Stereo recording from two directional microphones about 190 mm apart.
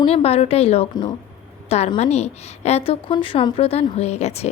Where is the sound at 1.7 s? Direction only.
35° left (ahead or behind).